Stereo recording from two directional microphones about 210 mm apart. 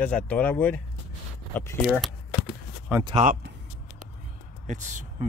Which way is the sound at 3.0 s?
30° right (ahead or behind).